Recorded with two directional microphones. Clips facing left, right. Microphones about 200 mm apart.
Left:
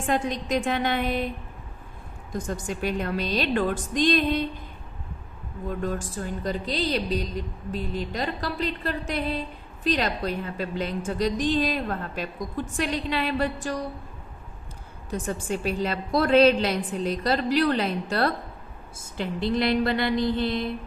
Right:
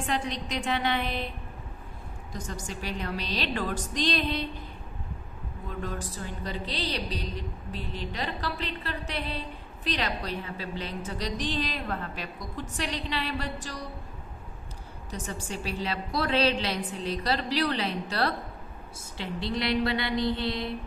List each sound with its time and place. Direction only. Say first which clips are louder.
0.0 s a woman's voice: left 5 dB; 45° left (ahead or behind)
2.3 s a woman's voice: left 7 dB; 50° left (ahead or behind)
5.7 s a woman's voice: left 6 dB; 45° left (ahead or behind)
15.0 s a woman's voice: left 8 dB; 50° left (ahead or behind)